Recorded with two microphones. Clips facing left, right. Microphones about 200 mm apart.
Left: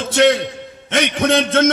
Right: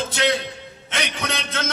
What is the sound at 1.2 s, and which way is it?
Speech, 50° left (ahead or behind).